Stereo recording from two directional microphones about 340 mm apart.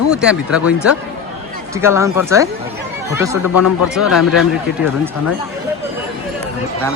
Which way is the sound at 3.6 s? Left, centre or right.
Left.